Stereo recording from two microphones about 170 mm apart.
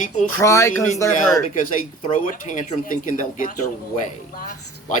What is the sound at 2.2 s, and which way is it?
Speech, 50° left (ahead or behind).